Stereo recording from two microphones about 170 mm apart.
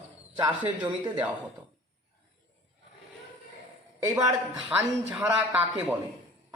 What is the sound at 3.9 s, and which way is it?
A man's voice, 15° right (ahead or behind).